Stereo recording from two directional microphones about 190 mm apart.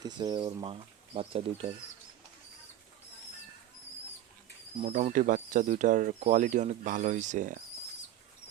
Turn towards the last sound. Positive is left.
turn(degrees=-45)  # may be behind; listen again after turning